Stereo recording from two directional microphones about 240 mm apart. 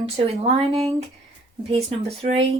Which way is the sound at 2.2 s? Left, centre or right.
Right.